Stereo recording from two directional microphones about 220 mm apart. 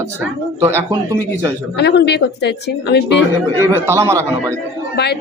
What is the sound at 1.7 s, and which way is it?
Speech, 50° left (ahead or behind).